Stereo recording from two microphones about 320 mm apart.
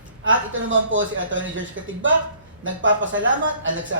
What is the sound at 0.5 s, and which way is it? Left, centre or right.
Speech, right.